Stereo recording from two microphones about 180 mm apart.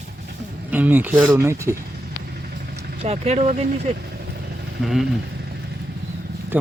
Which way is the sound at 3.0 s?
35° right (ahead or behind).